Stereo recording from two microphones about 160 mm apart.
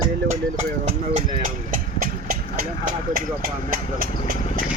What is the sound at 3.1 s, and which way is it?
Speech, 60° right (ahead or behind).